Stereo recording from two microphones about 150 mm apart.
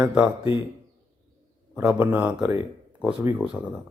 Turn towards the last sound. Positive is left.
turn(degrees=-10)  # may be behind; listen again after turning